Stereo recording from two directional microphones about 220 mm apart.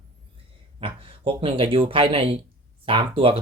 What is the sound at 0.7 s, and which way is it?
Speech, 25° right (ahead or behind).